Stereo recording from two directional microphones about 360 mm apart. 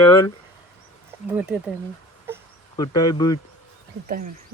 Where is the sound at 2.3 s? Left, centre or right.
Centre.